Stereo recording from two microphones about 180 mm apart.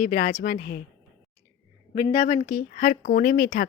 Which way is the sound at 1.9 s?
45° left (ahead or behind).